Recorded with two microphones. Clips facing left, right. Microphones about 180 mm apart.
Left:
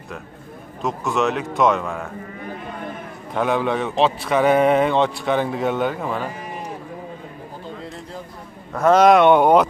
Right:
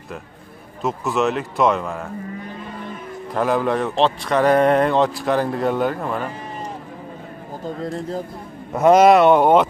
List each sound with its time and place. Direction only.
0.8 s speech: centre (ahead or behind)
3.3 s speech: centre (ahead or behind)
8.7 s speech: 15° right (ahead or behind)
9.0 s speech: 5° right (ahead or behind)